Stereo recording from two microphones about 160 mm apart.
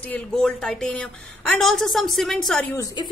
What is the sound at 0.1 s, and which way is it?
A woman's voice, 5° left (ahead or behind).